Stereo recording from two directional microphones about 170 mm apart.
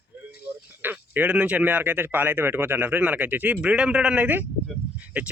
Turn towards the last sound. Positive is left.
turn(degrees=-5)  # may be behind; listen again after turning